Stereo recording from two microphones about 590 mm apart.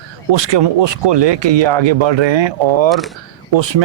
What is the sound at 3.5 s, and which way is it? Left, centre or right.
Speech, right.